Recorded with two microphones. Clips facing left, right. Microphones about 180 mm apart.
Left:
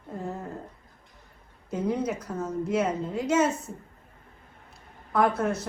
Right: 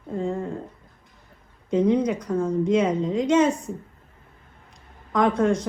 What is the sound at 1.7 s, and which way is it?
A woman's voice, 5° left (ahead or behind).